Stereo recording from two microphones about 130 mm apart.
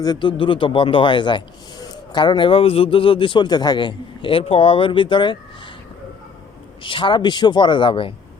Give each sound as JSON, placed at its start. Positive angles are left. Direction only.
{"t": 0.0, "sound": "speech", "side_deg": 35}
{"t": 6.8, "sound": "speech", "side_deg": 40}